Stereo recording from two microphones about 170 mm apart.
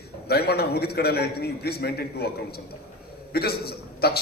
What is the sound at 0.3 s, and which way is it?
A man's voice, 70° left (ahead or behind).